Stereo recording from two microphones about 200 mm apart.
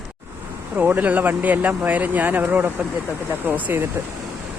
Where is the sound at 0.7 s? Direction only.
10° right (ahead or behind).